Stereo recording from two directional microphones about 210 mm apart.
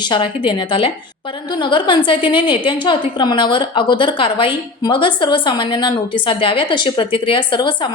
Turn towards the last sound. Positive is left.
turn(degrees=20)  # may be behind; listen again after turning